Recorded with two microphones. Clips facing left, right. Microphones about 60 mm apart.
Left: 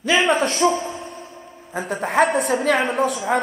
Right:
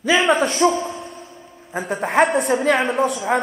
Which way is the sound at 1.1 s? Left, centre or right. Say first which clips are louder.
Left 1 dB; left.